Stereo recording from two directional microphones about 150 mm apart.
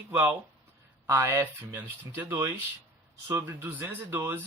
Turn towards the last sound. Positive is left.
turn(degrees=-15)  # may be behind; listen again after turning